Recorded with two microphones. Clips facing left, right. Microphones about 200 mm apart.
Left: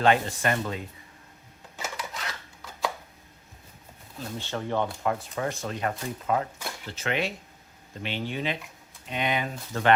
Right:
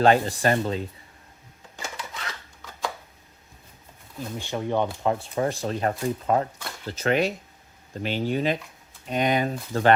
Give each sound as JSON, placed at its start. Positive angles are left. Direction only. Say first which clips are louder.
{"t": 0.0, "sound": "speech", "louder": "right 4 dB", "side_deg": -35}
{"t": 1.7, "sound": "a sound", "louder": "left 1 dB", "side_deg": 5}
{"t": 4.4, "sound": "speech", "louder": "right 3 dB", "side_deg": -15}
{"t": 5.4, "sound": "speech", "louder": "right 5 dB", "side_deg": -35}